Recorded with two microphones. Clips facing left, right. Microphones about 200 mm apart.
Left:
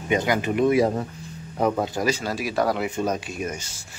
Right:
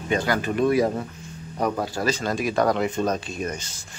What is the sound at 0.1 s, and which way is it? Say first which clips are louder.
Speech: left 1 dB; 15° left (ahead or behind).